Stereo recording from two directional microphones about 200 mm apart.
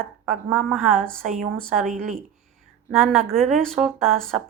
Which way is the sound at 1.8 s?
45° right (ahead or behind).